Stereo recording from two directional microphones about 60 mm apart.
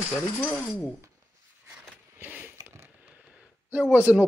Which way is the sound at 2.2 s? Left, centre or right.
Right.